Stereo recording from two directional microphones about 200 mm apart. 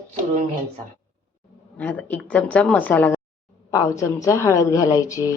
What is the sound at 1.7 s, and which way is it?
A woman's voice, 10° left (ahead or behind).